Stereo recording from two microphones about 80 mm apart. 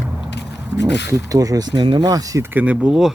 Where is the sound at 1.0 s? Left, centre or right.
Right.